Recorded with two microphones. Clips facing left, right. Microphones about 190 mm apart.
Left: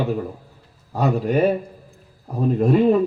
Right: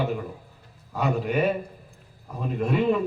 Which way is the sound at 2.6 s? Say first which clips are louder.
Left 6 dB; 40° left (ahead or behind).